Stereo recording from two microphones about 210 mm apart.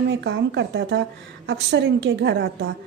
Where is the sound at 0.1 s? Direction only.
60° right (ahead or behind).